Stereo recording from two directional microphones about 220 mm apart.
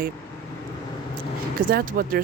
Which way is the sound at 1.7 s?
40° right (ahead or behind).